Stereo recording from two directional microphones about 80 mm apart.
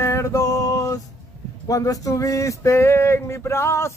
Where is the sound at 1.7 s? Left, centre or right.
Left.